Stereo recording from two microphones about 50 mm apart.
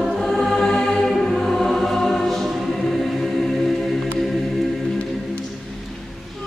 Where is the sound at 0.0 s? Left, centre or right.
Centre.